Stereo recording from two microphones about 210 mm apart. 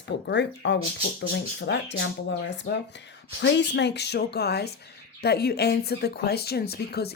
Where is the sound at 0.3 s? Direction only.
55° left (ahead or behind).